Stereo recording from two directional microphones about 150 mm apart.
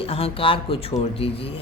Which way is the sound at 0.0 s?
40° left (ahead or behind).